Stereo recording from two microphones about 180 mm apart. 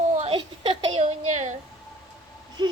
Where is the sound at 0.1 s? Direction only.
35° right (ahead or behind).